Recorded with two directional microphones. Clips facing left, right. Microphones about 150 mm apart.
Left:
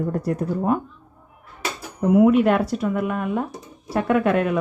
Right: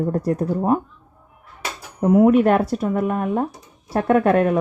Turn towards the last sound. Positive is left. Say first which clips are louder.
# right 3 dB
turn(degrees=-40)  # may be behind; listen again after turning